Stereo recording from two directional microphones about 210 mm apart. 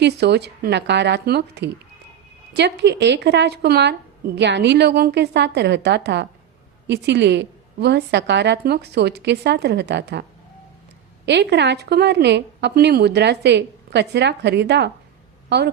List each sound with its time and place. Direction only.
0.0 s a woman's voice: 50° right (ahead or behind)
11.3 s a woman's voice: 55° right (ahead or behind)